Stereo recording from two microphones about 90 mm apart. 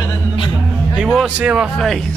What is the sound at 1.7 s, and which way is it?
Speech, 5° left (ahead or behind).